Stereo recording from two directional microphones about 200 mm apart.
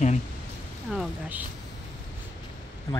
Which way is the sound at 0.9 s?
5° right (ahead or behind).